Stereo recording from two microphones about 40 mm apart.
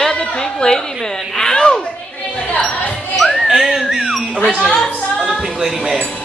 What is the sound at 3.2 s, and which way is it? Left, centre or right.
Dog, centre.